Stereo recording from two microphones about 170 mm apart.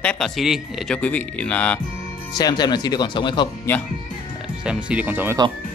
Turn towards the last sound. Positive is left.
turn(degrees=-10)  # may be behind; listen again after turning